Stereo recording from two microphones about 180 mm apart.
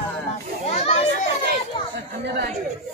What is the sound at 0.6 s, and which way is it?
Children playing, 35° left (ahead or behind).